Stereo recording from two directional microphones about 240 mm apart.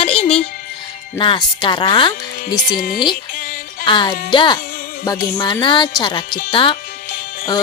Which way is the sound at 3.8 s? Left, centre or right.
Centre.